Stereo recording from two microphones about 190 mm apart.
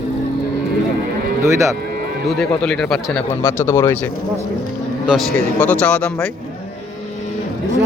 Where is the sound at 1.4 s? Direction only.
15° right (ahead or behind).